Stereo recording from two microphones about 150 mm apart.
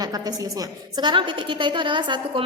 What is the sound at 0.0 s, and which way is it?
A woman's voice, 25° right (ahead or behind).